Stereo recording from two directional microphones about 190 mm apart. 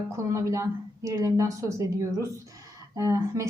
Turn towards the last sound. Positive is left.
turn(degrees=-15)  # may be behind; listen again after turning